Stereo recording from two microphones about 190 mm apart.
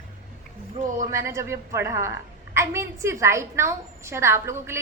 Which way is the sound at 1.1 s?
15° right (ahead or behind).